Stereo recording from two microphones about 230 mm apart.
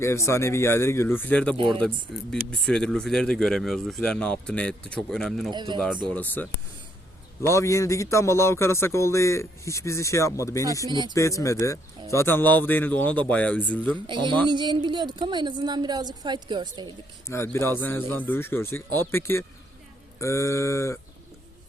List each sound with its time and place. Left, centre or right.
0.0 s a man's voice: centre
1.5 s speech: right
2.3 s speech: centre
5.5 s speech: centre
6.1 s a man's voice: centre
14.1 s speech: centre
17.2 s a man's voice: centre